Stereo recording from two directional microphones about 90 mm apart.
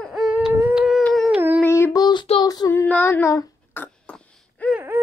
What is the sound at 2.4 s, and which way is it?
Child singing, 45° left (ahead or behind).